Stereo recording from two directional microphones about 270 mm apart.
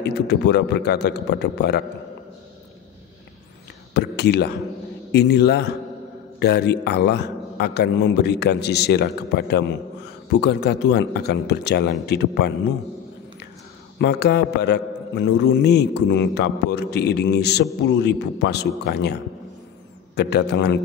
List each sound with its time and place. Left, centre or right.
0.3 s a man's voice: left
3.9 s a man's voice: left
13.9 s a man's voice: left
20.2 s a man's voice: left